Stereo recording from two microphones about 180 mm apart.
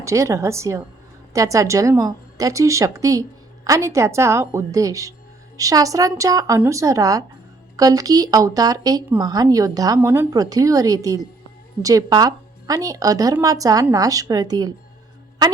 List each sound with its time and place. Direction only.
0.0 s a woman's voice: 15° right (ahead or behind)